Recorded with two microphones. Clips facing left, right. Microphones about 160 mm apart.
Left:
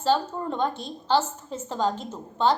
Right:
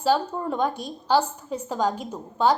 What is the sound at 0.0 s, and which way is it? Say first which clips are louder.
A woman's voice: right 1 dB; 10° right (ahead or behind).